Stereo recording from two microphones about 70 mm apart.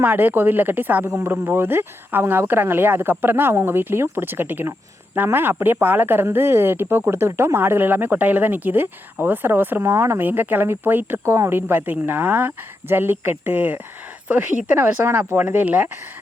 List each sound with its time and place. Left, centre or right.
0.0 s speech: right